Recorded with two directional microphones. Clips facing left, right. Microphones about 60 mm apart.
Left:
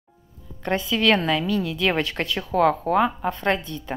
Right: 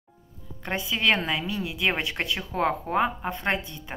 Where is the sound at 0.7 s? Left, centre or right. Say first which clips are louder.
Left 4 dB; right.